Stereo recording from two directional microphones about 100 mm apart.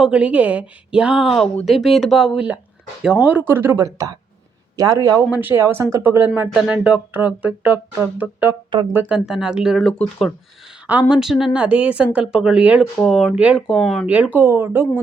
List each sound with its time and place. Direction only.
0.0 s speech: 10° right (ahead or behind); by 4.9 s 35° right (ahead or behind)
5.4 s speech: 20° right (ahead or behind)
9.1 s speech: 5° right (ahead or behind)
9.8 s speech: 5° left (ahead or behind)
11.1 s speech: 5° right (ahead or behind)
14.1 s speech: 15° right (ahead or behind)